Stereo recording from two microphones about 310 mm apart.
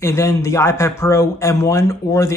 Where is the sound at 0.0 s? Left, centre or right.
Centre.